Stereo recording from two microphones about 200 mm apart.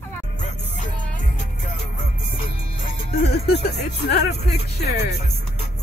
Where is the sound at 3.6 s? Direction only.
55° left (ahead or behind).